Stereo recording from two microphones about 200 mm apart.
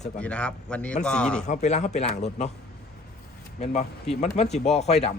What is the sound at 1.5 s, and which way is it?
Speech, 35° left (ahead or behind).